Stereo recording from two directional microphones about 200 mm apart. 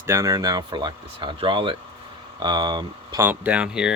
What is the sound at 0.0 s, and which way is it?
Speech, 15° right (ahead or behind).